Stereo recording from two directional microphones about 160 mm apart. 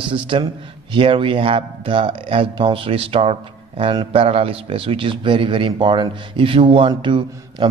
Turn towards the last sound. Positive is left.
turn(degrees=-30)  # may be behind; listen again after turning